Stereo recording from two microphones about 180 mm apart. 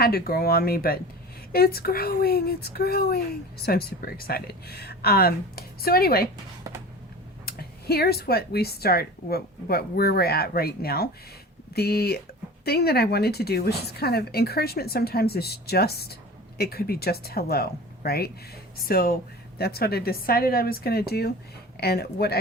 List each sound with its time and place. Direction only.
0.0 s speech: 55° left (ahead or behind)
7.4 s speech: 60° left (ahead or behind)